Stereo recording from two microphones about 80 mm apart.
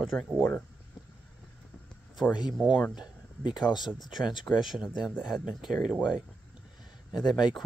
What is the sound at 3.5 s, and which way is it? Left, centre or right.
Speech, left.